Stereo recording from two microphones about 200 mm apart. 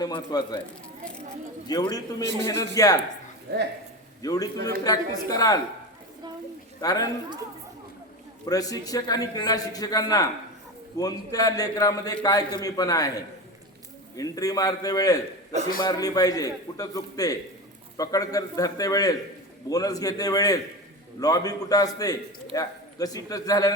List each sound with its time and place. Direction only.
0.0 s a man's voice: 20° left (ahead or behind)
1.6 s a man's voice: 20° left (ahead or behind)
4.2 s a man's voice: 20° left (ahead or behind)
6.8 s a man's voice: 20° left (ahead or behind)
8.4 s a man's voice: 15° left (ahead or behind)